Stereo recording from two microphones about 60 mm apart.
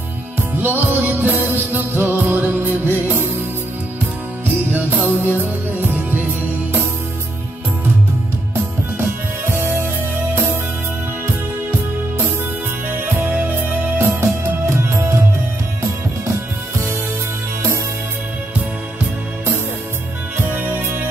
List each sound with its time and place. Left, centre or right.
0.4 s music: right
4.6 s music: right
8.9 s music: right
13.0 s music: right
20.3 s music: right